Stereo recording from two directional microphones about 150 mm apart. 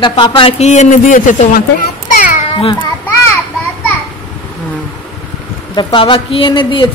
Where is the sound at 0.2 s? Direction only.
35° left (ahead or behind); by 1.5 s 60° left (ahead or behind).